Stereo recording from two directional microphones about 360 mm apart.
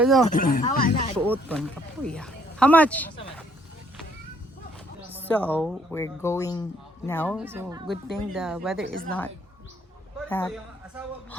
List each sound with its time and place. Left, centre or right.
0.0 s speech: centre
0.3 s speech: left
1.2 s speech: centre
5.1 s a sound: centre
5.5 s speech: centre
7.4 s speech: centre